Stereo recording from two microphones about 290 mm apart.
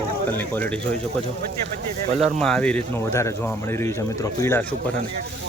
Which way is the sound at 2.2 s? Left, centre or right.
Centre.